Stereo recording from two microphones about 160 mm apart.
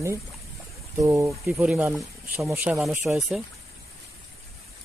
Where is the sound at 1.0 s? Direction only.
15° right (ahead or behind).